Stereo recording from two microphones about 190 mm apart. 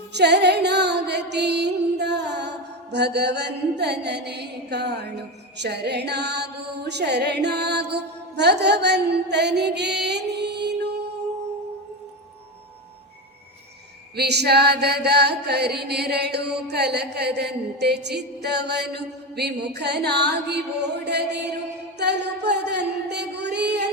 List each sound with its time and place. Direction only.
0.1 s music: 65° right (ahead or behind)
14.2 s music: 60° right (ahead or behind)